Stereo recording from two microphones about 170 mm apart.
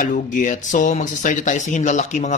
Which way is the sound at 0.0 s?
50° left (ahead or behind).